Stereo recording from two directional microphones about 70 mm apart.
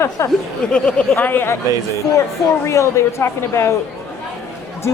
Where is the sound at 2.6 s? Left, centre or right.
Left.